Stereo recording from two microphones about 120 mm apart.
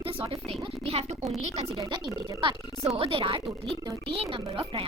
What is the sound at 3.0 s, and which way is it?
Speech, 45° right (ahead or behind).